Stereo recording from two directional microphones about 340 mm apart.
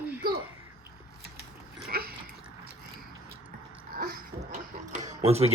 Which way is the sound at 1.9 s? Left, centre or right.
Right.